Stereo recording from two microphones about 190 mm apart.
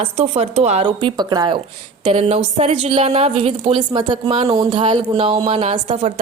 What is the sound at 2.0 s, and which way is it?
A woman's voice, 30° right (ahead or behind).